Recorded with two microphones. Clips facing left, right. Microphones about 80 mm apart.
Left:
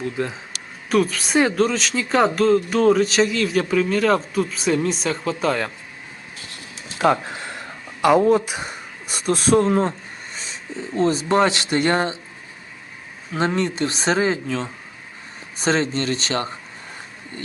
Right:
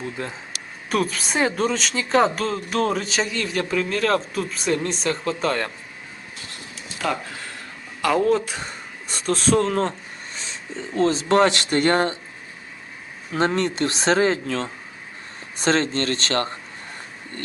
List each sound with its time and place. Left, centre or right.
0.0 s speech: centre
7.0 s speech: left
10.3 s a sound: centre
10.9 s speech: centre
13.3 s speech: centre